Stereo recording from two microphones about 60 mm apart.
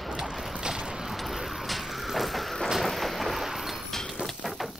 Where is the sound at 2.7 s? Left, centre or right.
Centre.